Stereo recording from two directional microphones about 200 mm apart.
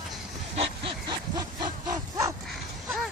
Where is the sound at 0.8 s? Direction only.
20° right (ahead or behind).